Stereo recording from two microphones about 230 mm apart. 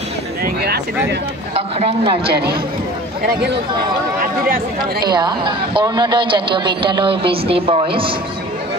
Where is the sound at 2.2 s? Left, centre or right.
Right.